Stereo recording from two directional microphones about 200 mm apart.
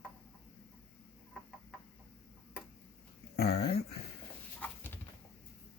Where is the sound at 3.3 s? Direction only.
55° left (ahead or behind).